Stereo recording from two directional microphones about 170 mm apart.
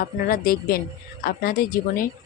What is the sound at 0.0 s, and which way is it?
A woman's voice, 60° left (ahead or behind).